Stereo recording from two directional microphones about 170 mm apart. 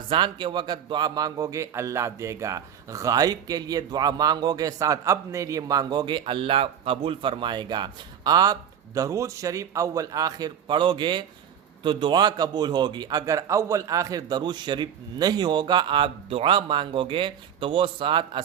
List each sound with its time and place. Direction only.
0.1 s speech: 30° right (ahead or behind)